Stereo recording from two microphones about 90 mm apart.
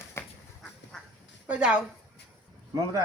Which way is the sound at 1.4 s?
15° right (ahead or behind).